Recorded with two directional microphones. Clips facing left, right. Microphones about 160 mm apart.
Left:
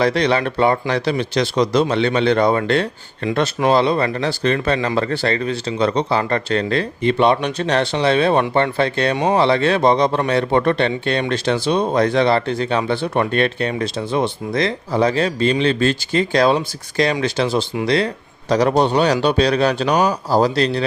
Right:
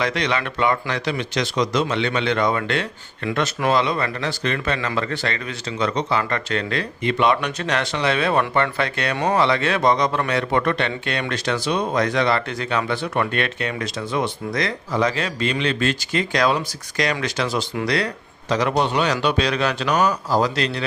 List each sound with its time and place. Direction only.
0.0 s a man's voice: 35° left (ahead or behind)